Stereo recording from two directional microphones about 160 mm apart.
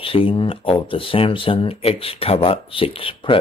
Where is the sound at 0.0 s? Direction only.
35° left (ahead or behind).